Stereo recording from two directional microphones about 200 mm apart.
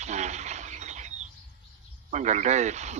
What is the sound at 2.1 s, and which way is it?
Chicken, 35° right (ahead or behind).